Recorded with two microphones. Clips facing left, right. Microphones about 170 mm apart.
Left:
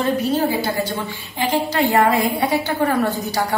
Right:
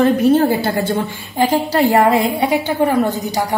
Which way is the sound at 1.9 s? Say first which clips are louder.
Right 3 dB; 25° right (ahead or behind).